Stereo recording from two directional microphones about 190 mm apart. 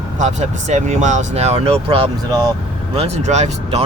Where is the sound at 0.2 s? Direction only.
40° right (ahead or behind).